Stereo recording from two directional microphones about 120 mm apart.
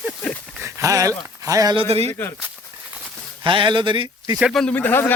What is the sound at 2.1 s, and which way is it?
Speech, 20° left (ahead or behind).